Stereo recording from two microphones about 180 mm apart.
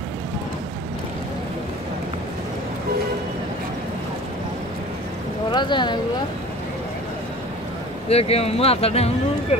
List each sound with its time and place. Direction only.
5.5 s speech: 25° left (ahead or behind)
8.1 s speech: 35° left (ahead or behind)